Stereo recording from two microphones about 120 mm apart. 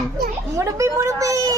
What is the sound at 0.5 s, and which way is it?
A child's voice, 25° right (ahead or behind).